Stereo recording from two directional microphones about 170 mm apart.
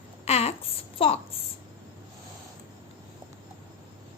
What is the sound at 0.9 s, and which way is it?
Speech, 35° left (ahead or behind).